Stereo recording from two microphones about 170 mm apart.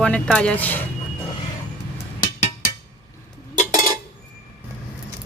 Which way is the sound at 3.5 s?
50° left (ahead or behind).